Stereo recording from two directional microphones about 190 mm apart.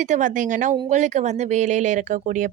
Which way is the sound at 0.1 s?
40° right (ahead or behind).